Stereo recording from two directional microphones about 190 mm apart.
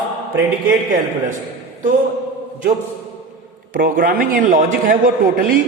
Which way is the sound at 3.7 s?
50° right (ahead or behind).